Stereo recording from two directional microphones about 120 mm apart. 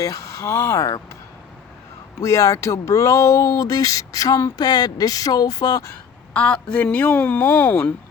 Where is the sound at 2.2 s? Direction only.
25° left (ahead or behind).